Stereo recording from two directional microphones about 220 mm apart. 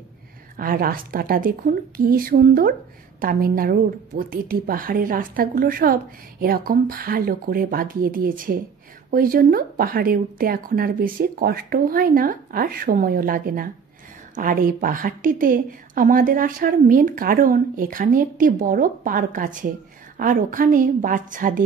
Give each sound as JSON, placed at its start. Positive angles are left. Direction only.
{"t": 0.6, "sound": "a woman's voice", "side_deg": -40}